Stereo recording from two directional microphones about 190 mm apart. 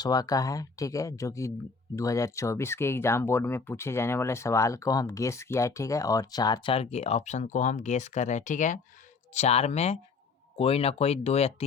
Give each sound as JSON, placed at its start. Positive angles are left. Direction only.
{"t": 0.0, "sound": "speech", "side_deg": 20}